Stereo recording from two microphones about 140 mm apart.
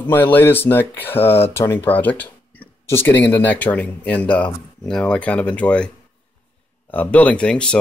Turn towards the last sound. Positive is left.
turn(degrees=5)  # may be behind; listen again after turning